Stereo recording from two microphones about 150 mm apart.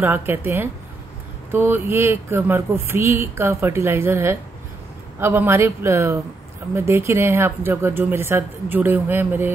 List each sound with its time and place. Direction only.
0.0 s speech: 15° right (ahead or behind)